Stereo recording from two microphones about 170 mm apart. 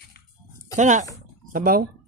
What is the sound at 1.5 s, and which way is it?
Speech, 60° right (ahead or behind).